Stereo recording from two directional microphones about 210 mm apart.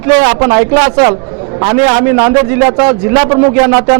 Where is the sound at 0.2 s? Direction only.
20° right (ahead or behind).